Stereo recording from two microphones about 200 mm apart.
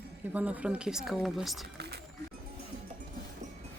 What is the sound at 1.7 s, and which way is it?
Speech, 55° right (ahead or behind).